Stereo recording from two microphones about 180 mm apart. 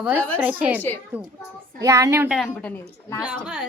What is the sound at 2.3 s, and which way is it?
Speech, centre (ahead or behind).